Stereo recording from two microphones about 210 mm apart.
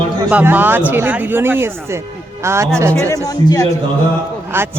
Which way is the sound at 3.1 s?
15° left (ahead or behind).